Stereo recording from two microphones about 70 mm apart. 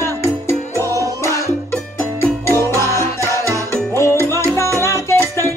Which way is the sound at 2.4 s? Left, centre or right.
Left.